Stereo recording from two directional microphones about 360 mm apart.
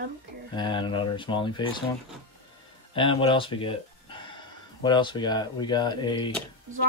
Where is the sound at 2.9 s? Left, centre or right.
Centre.